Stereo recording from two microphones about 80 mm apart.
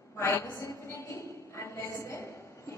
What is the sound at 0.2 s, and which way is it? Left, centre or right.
A woman's voice, left.